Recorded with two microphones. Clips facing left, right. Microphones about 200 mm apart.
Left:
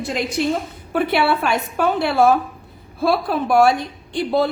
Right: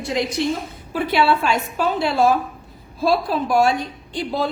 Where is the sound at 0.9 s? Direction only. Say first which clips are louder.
Even; 60° left (ahead or behind).